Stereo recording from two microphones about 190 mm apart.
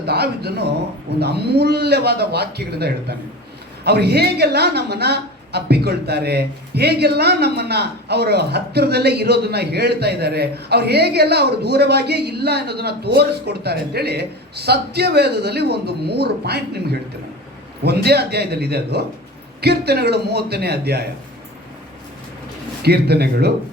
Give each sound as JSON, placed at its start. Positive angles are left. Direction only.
{"t": 0.0, "sound": "a woman's voice", "side_deg": -60}
{"t": 22.8, "sound": "a woman's voice", "side_deg": -60}